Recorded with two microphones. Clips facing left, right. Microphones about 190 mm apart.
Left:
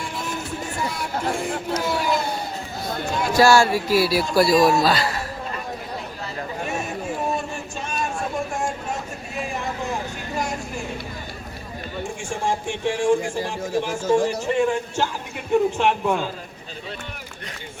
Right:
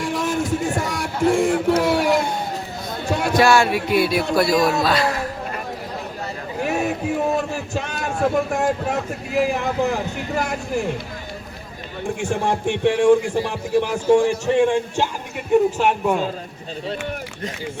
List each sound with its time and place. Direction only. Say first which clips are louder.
0.0 s music: right 8 dB; 75° right (ahead or behind)
1.8 s a sound: right 5 dB; 70° right (ahead or behind)
3.1 s speech: right 2 dB; 70° right (ahead or behind)
3.4 s a man's voice: left 2 dB; centre (ahead or behind)
6.6 s speech: right 8 dB; 70° right (ahead or behind)
12.2 s a man's voice: right 5 dB; 65° right (ahead or behind)
14.7 s speech: right 3 dB; 15° right (ahead or behind)
15.8 s a man's voice: right 2 dB; 5° right (ahead or behind)